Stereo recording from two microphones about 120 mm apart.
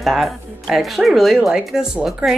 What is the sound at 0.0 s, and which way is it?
Speech, centre (ahead or behind).